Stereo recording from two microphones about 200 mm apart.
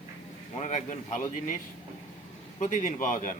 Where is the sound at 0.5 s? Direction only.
35° left (ahead or behind).